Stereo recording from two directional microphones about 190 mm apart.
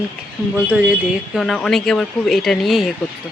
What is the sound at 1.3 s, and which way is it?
Speech, centre (ahead or behind).